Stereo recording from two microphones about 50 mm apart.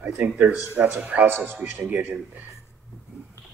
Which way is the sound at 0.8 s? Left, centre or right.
Right.